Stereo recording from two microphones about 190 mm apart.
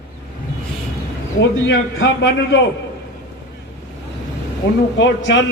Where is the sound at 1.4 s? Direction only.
75° left (ahead or behind).